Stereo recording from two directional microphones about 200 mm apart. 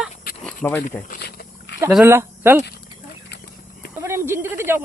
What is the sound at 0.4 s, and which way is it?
Speech, 10° left (ahead or behind).